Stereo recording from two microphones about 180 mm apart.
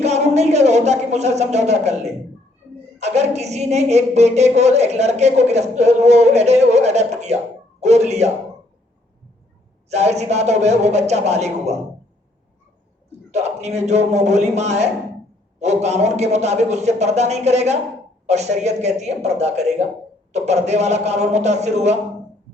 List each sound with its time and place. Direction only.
0.0 s a woman's voice: 35° right (ahead or behind)
9.9 s a woman's voice: 40° right (ahead or behind)
13.1 s a man's voice: 35° right (ahead or behind)